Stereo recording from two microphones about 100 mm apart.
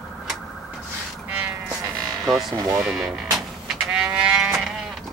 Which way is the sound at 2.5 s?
35° right (ahead or behind).